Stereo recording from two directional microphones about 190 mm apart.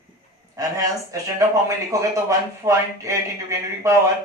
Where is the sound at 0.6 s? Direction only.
15° right (ahead or behind).